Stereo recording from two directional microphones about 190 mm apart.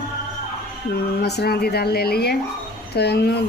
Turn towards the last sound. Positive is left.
turn(degrees=60)  # may be behind; listen again after turning